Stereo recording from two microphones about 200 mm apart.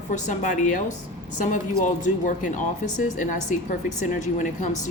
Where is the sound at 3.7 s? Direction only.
40° left (ahead or behind).